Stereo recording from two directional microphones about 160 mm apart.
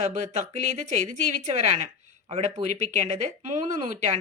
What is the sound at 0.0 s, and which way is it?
Speech, 45° right (ahead or behind).